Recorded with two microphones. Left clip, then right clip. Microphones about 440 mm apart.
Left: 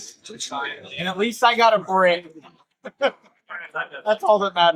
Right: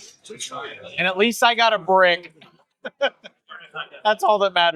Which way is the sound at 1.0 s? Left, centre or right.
Right.